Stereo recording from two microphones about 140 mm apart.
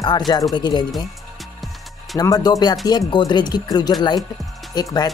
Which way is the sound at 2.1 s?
25° left (ahead or behind).